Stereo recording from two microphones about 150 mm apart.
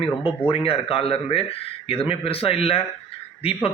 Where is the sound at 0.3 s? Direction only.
35° left (ahead or behind).